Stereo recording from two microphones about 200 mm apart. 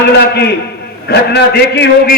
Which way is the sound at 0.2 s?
55° left (ahead or behind).